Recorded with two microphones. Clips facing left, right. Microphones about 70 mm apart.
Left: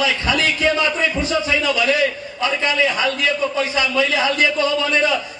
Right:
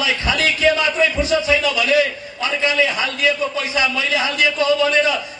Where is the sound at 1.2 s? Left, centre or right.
Left.